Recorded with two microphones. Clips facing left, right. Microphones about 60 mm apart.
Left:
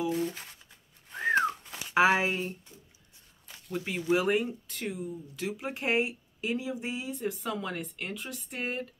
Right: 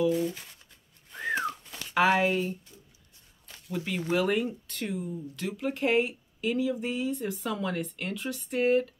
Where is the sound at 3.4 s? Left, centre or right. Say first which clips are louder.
Right 1 dB; centre.